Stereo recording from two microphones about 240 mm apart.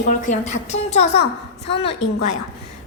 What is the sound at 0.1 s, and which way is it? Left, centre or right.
A woman's voice, left.